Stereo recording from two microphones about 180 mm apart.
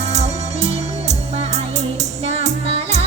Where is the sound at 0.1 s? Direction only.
40° right (ahead or behind).